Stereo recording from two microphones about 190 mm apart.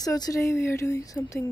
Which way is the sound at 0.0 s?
20° left (ahead or behind).